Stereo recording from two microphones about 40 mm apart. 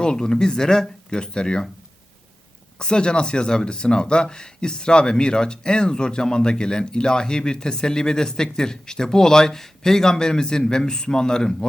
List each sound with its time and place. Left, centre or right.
0.0 s speech: centre
2.7 s speech: left